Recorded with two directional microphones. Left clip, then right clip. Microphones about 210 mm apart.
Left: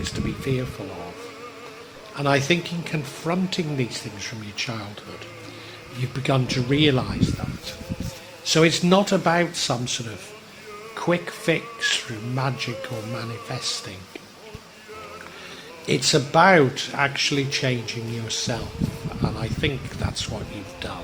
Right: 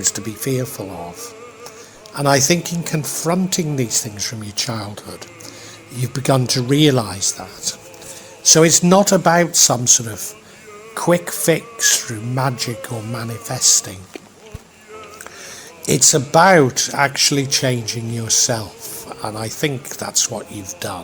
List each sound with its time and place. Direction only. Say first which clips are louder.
0.0 s speech: right 6 dB; 40° right (ahead or behind)
2.1 s speech: right 6 dB; 40° right (ahead or behind)
6.0 s speech: right 6 dB; 40° right (ahead or behind)
8.4 s speech: right 6 dB; 40° right (ahead or behind)
15.9 s speech: right 6 dB; 40° right (ahead or behind)